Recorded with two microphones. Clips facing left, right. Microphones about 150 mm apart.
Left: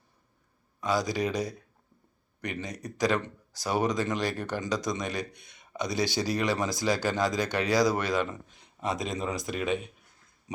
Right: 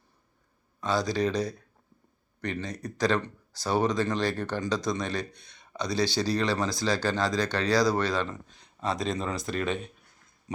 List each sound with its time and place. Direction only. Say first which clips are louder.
0.8 s speech: right 1 dB; 15° left (ahead or behind)